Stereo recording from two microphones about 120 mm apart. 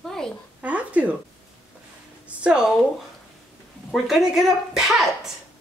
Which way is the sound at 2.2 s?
10° right (ahead or behind).